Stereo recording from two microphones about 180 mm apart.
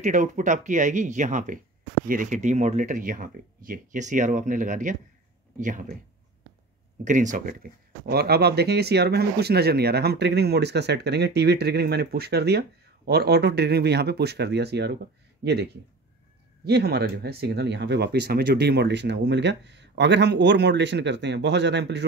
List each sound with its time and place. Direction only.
0.0 s speech: 45° right (ahead or behind)
7.1 s speech: 45° right (ahead or behind); by 22.0 s 75° right (ahead or behind)